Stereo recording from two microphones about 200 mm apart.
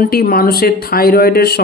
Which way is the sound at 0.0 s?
50° left (ahead or behind).